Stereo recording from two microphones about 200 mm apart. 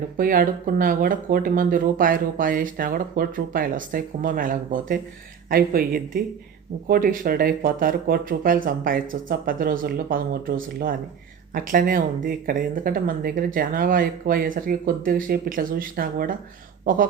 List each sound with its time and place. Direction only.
0.2 s speech: 45° right (ahead or behind)